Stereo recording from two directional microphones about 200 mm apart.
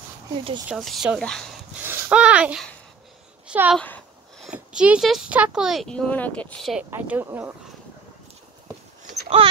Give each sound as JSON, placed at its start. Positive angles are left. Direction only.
{"t": 0.7, "sound": "speech", "side_deg": 0}
{"t": 1.8, "sound": "a sound", "side_deg": -10}
{"t": 3.4, "sound": "speech", "side_deg": -5}
{"t": 3.8, "sound": "a sound", "side_deg": 10}
{"t": 4.5, "sound": "speech", "side_deg": -5}
{"t": 6.9, "sound": "speech", "side_deg": -10}
{"t": 9.4, "sound": "speech", "side_deg": -25}